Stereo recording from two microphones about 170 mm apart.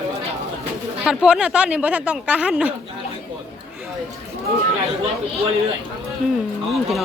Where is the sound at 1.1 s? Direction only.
5° right (ahead or behind).